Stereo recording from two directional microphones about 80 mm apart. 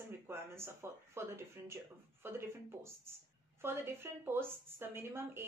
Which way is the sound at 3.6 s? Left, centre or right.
Right.